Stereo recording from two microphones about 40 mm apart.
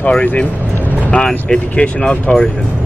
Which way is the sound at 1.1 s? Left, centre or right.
Left.